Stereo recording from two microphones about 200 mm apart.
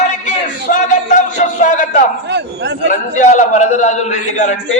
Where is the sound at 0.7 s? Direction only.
40° left (ahead or behind).